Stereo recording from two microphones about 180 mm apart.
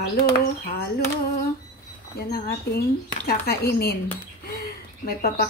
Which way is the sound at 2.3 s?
60° left (ahead or behind).